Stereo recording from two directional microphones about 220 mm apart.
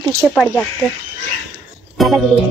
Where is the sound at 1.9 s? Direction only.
Centre (ahead or behind).